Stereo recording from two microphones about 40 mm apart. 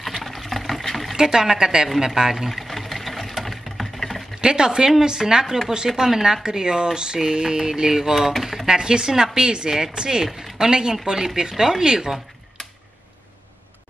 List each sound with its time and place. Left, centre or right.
0.0 s water: centre
1.1 s mantra: centre
2.3 s sewing machine: centre
4.4 s speech: right
5.0 s mantra: centre
8.6 s speech: centre
10.6 s mantra: centre